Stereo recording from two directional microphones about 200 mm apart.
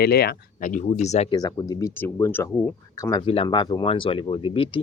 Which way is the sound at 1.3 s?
20° left (ahead or behind).